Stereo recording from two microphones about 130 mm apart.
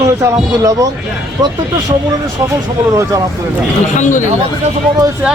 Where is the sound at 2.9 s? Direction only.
25° right (ahead or behind).